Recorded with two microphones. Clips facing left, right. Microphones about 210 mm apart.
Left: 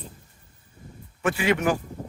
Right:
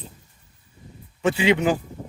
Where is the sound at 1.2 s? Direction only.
20° right (ahead or behind).